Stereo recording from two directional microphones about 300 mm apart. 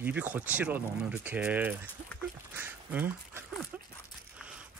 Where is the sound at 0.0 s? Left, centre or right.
Centre.